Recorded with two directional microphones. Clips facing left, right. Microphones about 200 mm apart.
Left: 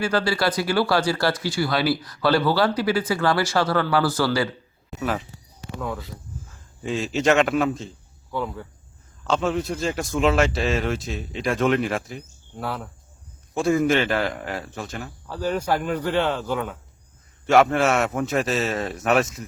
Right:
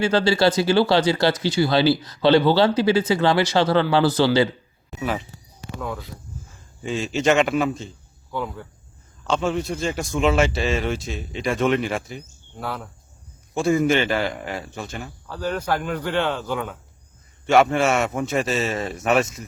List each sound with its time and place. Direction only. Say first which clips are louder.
0.0 s speech: right 4 dB; 25° right (ahead or behind)
4.9 s a man's voice: even; centre (ahead or behind)